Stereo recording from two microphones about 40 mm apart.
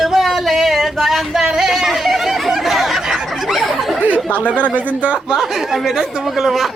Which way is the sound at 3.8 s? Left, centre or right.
Centre.